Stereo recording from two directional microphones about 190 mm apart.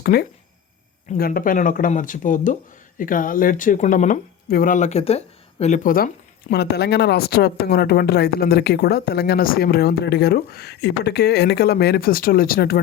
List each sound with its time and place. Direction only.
0.0 s speech: 55° left (ahead or behind)
6.5 s speech: 60° left (ahead or behind)